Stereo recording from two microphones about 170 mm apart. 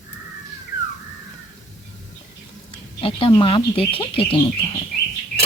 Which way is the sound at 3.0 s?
30° left (ahead or behind).